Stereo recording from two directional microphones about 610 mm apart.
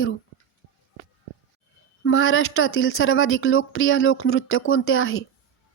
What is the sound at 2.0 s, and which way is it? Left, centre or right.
Speech, centre.